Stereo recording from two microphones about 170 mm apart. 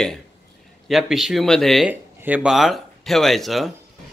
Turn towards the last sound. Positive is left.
turn(degrees=0)  # may be behind; listen again after turning